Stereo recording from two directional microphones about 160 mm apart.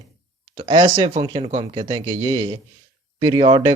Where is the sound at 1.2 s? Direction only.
30° right (ahead or behind).